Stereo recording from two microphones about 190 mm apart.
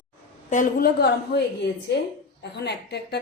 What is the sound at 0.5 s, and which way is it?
A woman's voice, 45° left (ahead or behind).